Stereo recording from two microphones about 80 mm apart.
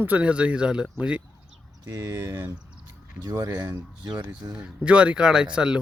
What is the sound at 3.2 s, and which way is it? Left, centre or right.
Speech, right.